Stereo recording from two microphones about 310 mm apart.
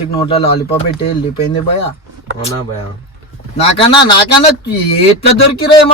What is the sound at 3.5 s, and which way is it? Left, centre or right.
Speech, centre.